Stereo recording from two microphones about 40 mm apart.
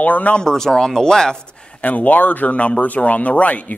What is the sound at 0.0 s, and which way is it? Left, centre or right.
Speech, left.